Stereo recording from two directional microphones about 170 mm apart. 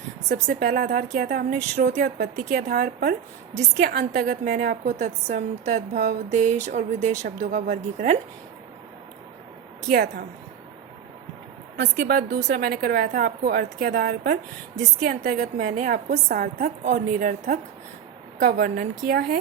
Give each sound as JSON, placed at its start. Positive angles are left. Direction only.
{"t": 0.4, "sound": "a woman's voice", "side_deg": -55}
{"t": 2.5, "sound": "a woman's voice", "side_deg": -55}
{"t": 4.8, "sound": "a woman's voice", "side_deg": -45}
{"t": 9.9, "sound": "speech", "side_deg": -70}
{"t": 11.9, "sound": "a woman's voice", "side_deg": -60}
{"t": 14.8, "sound": "a woman's voice", "side_deg": -50}